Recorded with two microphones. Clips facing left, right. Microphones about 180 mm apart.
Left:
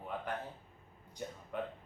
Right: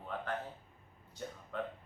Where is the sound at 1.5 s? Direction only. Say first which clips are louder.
Even; 15° left (ahead or behind).